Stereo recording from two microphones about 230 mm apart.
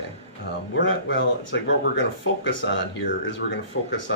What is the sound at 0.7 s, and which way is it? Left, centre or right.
Speech, left.